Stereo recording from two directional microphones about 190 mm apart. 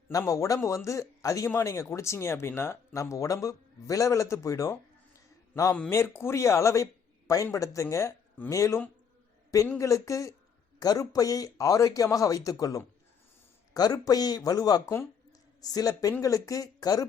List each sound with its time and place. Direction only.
0.1 s speech: 15° left (ahead or behind)